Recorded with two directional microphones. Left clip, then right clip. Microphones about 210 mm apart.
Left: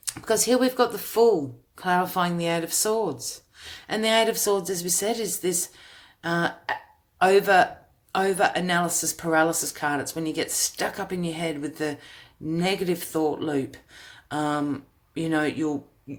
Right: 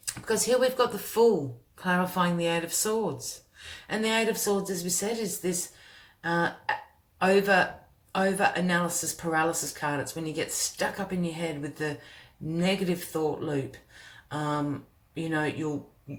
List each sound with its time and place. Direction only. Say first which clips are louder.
0.0 s speech: left 4 dB; 45° left (ahead or behind)